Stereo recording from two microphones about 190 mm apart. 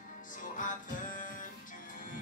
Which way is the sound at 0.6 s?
45° left (ahead or behind).